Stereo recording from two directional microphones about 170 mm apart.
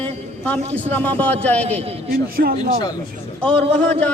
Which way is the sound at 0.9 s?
10° left (ahead or behind).